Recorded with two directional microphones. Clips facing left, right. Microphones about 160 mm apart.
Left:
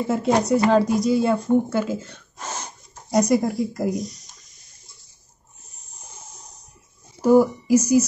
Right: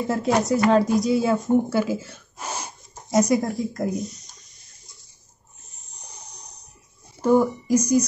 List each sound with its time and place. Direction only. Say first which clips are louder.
0.1 s speech: left 2 dB; centre (ahead or behind)
6.0 s a sound: left 1 dB; centre (ahead or behind)
7.2 s a woman's voice: left 3 dB; 10° left (ahead or behind)